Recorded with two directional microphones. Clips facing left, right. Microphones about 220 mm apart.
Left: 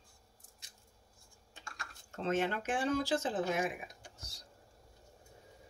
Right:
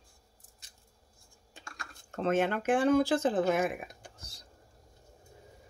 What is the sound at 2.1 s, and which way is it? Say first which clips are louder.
Speech: right 5 dB; 55° right (ahead or behind).